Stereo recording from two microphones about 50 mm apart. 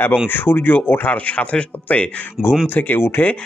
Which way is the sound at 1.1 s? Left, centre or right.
Left.